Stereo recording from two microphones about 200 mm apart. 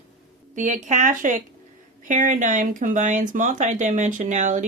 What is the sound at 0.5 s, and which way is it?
Speech, 40° right (ahead or behind).